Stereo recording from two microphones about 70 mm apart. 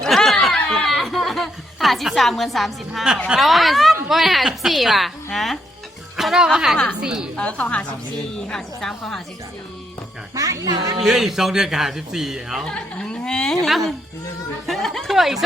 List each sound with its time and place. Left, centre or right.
0.0 s a sound: centre
3.4 s a woman's voice: centre
7.3 s a woman's voice: centre
10.3 s music: right
11.0 s speech: centre
12.6 s speech: centre
14.7 s a sound: centre